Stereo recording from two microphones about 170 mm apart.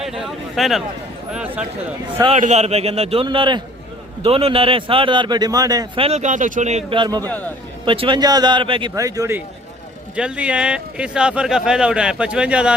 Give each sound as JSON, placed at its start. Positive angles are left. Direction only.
{"t": 0.0, "sound": "speech", "side_deg": 0}
{"t": 2.3, "sound": "a man's voice", "side_deg": -40}
{"t": 6.0, "sound": "speech", "side_deg": -40}
{"t": 6.9, "sound": "speech", "side_deg": -25}
{"t": 7.3, "sound": "a man's voice", "side_deg": 10}
{"t": 7.9, "sound": "speech", "side_deg": -30}
{"t": 10.2, "sound": "speech", "side_deg": -5}